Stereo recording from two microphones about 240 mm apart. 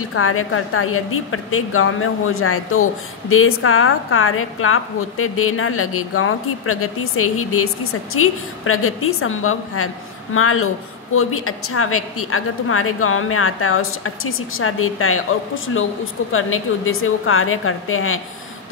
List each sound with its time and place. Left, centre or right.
0.1 s a woman's voice: left